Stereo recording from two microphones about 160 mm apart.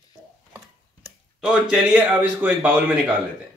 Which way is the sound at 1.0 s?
5° right (ahead or behind).